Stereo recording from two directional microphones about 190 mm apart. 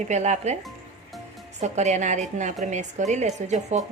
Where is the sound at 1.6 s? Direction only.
35° right (ahead or behind).